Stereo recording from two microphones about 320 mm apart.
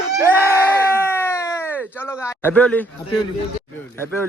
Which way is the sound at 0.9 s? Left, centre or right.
Centre.